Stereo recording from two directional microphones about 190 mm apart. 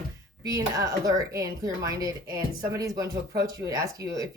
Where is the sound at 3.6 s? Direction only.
20° right (ahead or behind).